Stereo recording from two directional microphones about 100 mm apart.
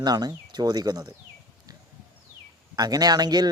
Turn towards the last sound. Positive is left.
turn(degrees=-40)  # may be behind; listen again after turning